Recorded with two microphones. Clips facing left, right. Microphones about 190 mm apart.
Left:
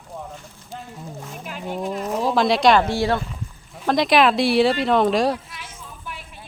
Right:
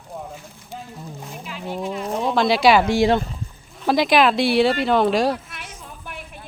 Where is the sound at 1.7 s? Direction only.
Centre (ahead or behind); by 3.2 s 15° right (ahead or behind).